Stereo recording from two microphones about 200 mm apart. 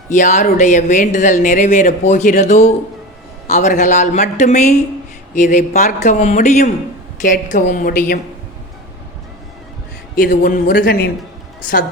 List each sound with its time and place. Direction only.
0.1 s speech: 40° left (ahead or behind)
10.2 s speech: 45° left (ahead or behind)